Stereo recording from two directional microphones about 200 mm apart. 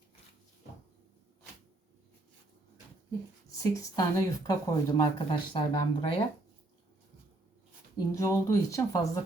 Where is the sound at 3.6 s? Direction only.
15° left (ahead or behind).